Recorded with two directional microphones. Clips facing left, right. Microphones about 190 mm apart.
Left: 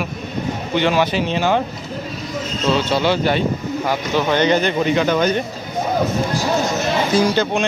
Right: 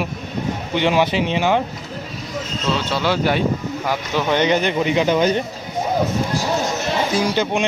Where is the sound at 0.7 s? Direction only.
20° right (ahead or behind).